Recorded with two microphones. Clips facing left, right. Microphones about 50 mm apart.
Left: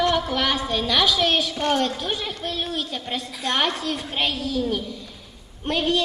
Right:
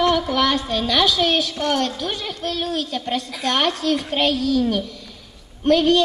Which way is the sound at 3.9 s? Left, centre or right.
Right.